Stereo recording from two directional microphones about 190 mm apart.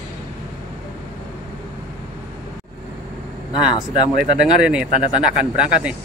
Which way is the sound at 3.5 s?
25° left (ahead or behind).